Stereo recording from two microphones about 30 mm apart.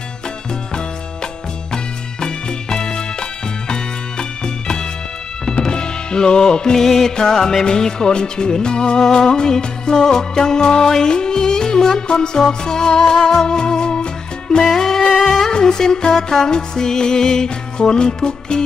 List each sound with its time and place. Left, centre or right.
1.7 s music: left
6.8 s music: centre; by 14.0 s left
14.6 s music: centre; by 18.6 s left